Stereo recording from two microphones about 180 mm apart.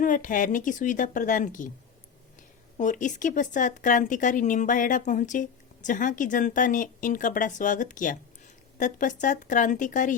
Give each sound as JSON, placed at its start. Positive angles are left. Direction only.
{"t": 0.0, "sound": "speech", "side_deg": 45}
{"t": 2.7, "sound": "speech", "side_deg": 45}